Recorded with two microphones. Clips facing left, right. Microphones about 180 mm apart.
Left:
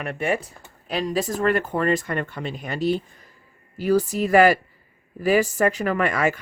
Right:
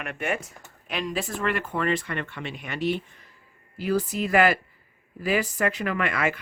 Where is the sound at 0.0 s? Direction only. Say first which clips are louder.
Left 5 dB; 35° left (ahead or behind).